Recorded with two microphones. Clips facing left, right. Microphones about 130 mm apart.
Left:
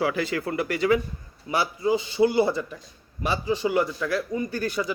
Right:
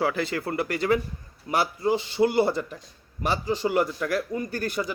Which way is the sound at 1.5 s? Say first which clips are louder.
Right 1 dB; 55° right (ahead or behind).